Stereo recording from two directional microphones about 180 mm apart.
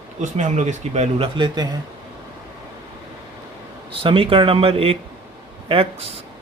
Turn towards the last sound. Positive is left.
turn(degrees=-30)  # may be behind; listen again after turning